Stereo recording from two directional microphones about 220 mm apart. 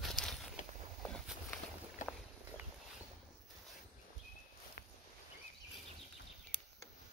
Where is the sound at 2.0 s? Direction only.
35° left (ahead or behind).